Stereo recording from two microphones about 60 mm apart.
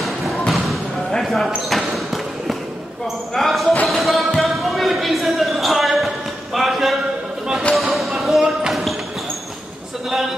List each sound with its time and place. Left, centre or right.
0.5 s basketball bounce: centre
3.3 s basketball bounce: centre
3.8 s music: centre
4.4 s basketball bounce: centre